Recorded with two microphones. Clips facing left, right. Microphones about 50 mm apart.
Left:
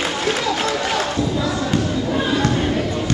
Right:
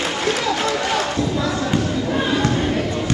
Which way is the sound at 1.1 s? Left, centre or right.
Centre.